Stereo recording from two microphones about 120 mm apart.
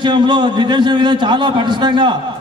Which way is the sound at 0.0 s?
40° right (ahead or behind).